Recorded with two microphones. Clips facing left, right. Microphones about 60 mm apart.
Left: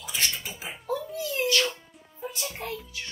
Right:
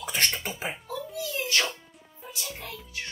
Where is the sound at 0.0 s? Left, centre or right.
Right.